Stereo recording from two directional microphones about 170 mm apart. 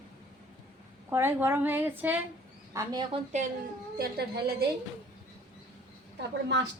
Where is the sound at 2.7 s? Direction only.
20° right (ahead or behind).